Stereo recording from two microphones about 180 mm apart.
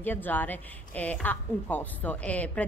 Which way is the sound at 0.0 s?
10° left (ahead or behind).